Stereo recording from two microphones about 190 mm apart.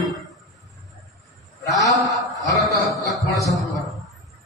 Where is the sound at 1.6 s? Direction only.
20° left (ahead or behind).